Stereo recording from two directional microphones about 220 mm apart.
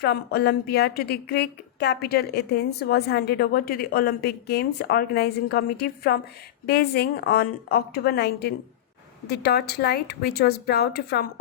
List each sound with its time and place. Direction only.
0.0 s a woman's voice: 45° left (ahead or behind)